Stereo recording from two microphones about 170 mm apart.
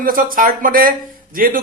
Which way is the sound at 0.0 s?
55° right (ahead or behind).